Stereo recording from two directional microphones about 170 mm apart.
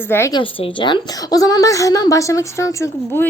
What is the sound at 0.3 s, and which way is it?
A woman's voice, 30° left (ahead or behind).